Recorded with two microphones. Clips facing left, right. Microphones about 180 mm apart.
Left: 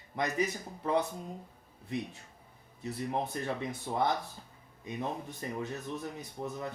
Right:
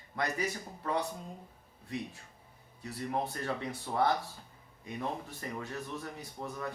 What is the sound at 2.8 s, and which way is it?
Speech, 20° left (ahead or behind).